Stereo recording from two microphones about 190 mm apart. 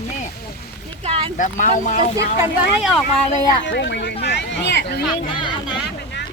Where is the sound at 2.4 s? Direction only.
5° right (ahead or behind).